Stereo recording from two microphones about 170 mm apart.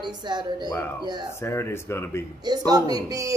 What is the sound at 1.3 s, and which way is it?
Speech, 15° left (ahead or behind).